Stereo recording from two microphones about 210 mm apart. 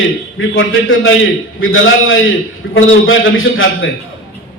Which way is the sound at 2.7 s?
70° left (ahead or behind).